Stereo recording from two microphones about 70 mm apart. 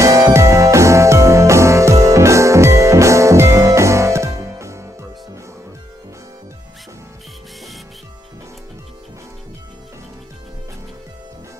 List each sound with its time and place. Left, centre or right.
0.0 s music: right